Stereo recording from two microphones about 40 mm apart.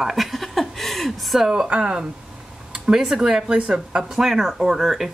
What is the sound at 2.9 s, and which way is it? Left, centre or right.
Speech, centre.